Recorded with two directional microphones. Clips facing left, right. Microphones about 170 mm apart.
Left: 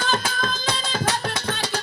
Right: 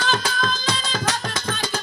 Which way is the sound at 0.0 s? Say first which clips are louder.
Right 1 dB; 50° left (ahead or behind).